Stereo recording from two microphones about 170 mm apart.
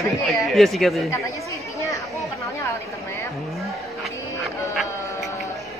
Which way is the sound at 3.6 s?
Centre (ahead or behind).